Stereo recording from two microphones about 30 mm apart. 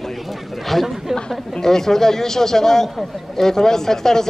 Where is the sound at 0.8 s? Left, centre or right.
Centre.